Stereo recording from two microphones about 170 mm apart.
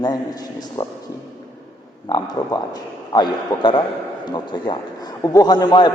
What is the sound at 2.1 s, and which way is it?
A man's voice, 25° left (ahead or behind).